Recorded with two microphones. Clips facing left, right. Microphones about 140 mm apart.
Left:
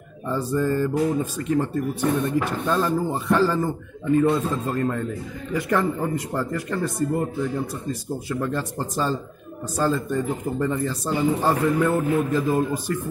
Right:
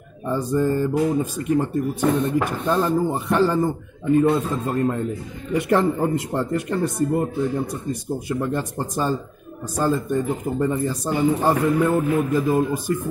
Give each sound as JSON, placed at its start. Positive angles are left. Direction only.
{"t": 0.3, "sound": "speech", "side_deg": -15}